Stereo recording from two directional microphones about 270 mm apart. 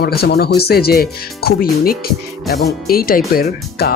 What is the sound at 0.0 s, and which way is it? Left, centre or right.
Speech, left.